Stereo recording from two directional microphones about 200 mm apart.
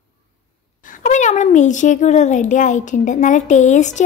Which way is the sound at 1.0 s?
35° left (ahead or behind).